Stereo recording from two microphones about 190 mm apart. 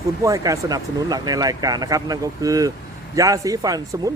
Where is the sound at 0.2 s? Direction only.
15° right (ahead or behind).